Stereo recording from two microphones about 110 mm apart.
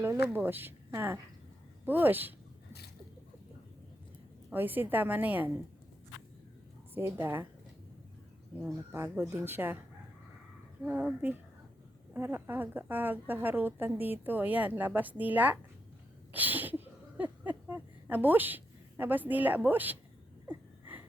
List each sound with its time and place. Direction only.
0.0 s a woman's voice: 20° right (ahead or behind)
4.5 s a woman's voice: 20° right (ahead or behind)
6.9 s speech: 20° right (ahead or behind)
8.9 s speech: 20° right (ahead or behind)
10.8 s a woman's voice: 15° right (ahead or behind)
16.3 s a sound: 15° right (ahead or behind)